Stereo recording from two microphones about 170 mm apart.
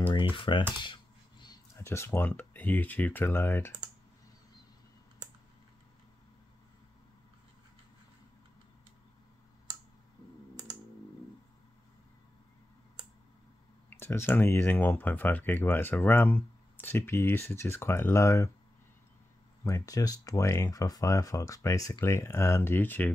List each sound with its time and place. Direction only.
0.1 s speech: 30° left (ahead or behind)
1.8 s speech: 15° left (ahead or behind)
13.8 s speech: 15° left (ahead or behind)
19.6 s speech: 20° left (ahead or behind)